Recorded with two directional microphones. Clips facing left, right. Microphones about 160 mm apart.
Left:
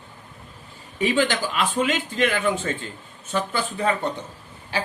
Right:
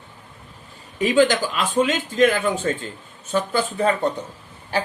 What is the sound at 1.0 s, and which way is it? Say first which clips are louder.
A man's voice: right 5 dB; 40° right (ahead or behind).